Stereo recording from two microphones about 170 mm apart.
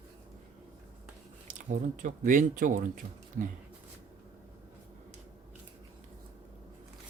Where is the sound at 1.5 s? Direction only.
50° right (ahead or behind).